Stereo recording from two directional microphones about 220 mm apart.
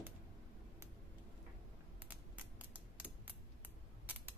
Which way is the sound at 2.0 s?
5° right (ahead or behind).